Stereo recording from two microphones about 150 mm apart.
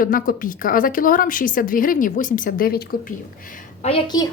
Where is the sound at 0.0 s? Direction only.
65° left (ahead or behind).